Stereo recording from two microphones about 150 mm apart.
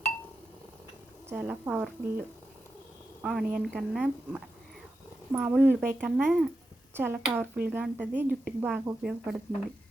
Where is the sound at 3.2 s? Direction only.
Centre (ahead or behind).